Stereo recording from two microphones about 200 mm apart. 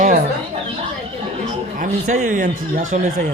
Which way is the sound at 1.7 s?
45° right (ahead or behind).